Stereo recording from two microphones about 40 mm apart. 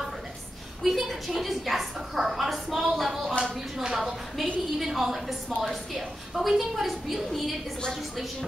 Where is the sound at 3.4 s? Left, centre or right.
Right.